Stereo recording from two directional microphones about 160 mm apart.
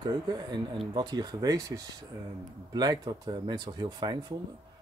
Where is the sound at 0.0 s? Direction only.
25° right (ahead or behind).